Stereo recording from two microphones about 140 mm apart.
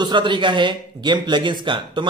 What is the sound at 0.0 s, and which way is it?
A man's voice, 35° right (ahead or behind).